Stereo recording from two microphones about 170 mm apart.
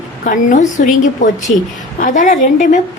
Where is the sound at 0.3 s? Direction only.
50° left (ahead or behind).